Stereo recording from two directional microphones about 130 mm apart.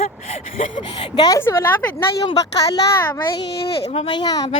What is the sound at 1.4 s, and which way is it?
Speech, 20° left (ahead or behind).